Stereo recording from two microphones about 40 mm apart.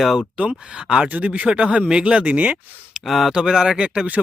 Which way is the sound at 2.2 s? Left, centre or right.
Right.